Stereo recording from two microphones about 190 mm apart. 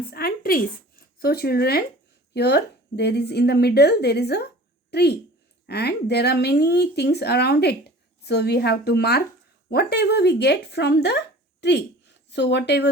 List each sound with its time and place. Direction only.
0.1 s a woman's voice: 50° left (ahead or behind)